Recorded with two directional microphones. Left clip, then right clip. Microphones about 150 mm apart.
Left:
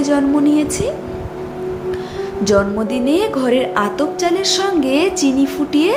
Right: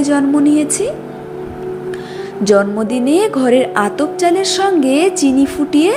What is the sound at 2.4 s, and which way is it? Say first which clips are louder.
A woman's voice: right 3 dB; 25° right (ahead or behind).